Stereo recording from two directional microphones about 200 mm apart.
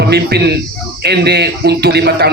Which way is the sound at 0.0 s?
55° right (ahead or behind).